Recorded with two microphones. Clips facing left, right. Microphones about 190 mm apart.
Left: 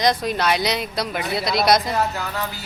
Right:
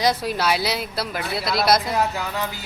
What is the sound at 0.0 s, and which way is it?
Speech, 5° right (ahead or behind).